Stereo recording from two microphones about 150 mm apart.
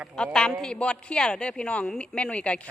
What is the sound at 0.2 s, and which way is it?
A man's voice, 5° left (ahead or behind).